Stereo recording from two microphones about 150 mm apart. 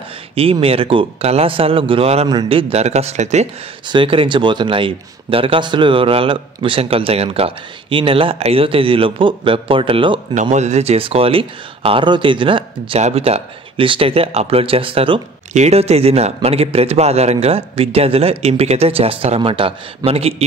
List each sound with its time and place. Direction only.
0.4 s a man's voice: 40° right (ahead or behind)
2.2 s a man's voice: 30° right (ahead or behind)
2.7 s speech: 45° right (ahead or behind)
3.9 s a man's voice: 35° right (ahead or behind)
10.3 s a man's voice: 55° right (ahead or behind); by 15.2 s 35° right (ahead or behind)
15.5 s a man's voice: 45° right (ahead or behind)